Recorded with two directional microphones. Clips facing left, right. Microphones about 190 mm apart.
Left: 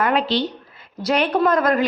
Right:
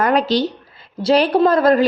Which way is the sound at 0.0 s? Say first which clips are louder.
Right 3 dB; 40° right (ahead or behind).